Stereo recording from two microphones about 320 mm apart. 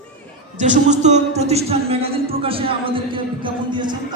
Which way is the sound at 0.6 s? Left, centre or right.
Right.